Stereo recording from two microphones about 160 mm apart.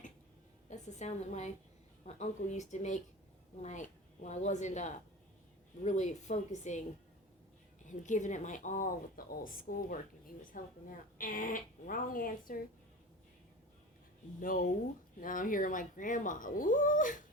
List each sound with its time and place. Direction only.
0.7 s a woman's voice: 45° left (ahead or behind)
7.9 s a woman's voice: 50° left (ahead or behind)
14.4 s a woman's voice: 60° left (ahead or behind)